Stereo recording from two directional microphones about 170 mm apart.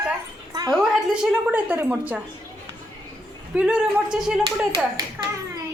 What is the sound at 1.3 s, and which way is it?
Speech, 10° right (ahead or behind).